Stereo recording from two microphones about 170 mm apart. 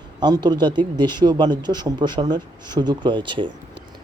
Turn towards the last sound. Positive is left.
turn(degrees=-30)  # may be behind; listen again after turning